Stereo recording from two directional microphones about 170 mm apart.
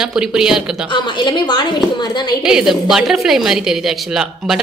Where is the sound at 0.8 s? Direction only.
25° left (ahead or behind).